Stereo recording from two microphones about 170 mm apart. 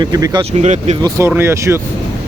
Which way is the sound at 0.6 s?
45° right (ahead or behind).